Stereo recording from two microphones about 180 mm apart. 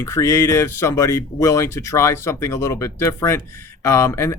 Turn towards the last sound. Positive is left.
turn(degrees=15)  # may be behind; listen again after turning